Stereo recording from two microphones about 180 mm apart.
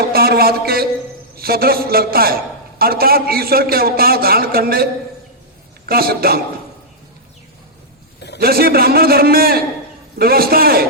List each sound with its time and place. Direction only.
0.0 s a man's voice: 60° right (ahead or behind)
8.4 s a man's voice: 55° right (ahead or behind)